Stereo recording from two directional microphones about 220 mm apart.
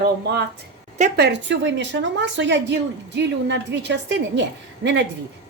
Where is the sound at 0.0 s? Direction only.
50° right (ahead or behind).